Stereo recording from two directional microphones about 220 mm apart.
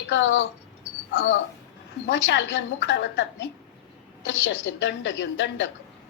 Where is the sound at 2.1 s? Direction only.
55° left (ahead or behind).